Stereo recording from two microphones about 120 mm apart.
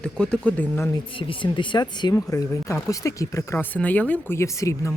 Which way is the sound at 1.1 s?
45° left (ahead or behind).